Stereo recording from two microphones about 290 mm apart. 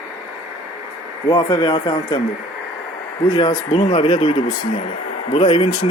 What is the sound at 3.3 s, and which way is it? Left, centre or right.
Speech, centre.